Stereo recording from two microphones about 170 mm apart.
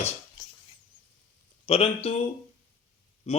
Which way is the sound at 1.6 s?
35° left (ahead or behind).